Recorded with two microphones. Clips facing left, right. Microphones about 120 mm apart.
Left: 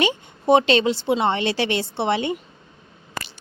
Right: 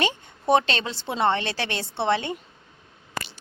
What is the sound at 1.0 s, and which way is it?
A woman's voice, 5° left (ahead or behind).